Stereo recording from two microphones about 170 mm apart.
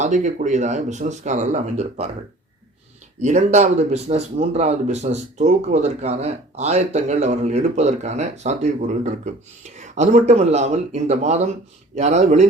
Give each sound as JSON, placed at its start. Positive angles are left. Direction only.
{"t": 0.0, "sound": "speech", "side_deg": -45}
{"t": 3.2, "sound": "speech", "side_deg": -45}